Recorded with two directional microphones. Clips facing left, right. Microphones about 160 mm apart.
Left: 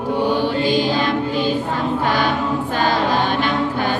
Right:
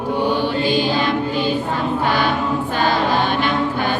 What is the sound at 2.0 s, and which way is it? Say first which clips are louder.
Choir: right 1 dB; 45° left (ahead or behind).